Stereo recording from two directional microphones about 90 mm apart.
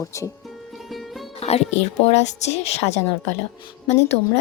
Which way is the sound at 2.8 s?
90° left.